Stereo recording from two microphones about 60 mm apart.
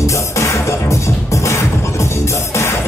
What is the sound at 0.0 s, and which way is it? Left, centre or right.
Music, left.